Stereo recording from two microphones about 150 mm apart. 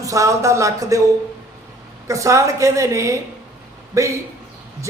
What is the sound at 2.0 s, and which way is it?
A man's voice, 20° right (ahead or behind).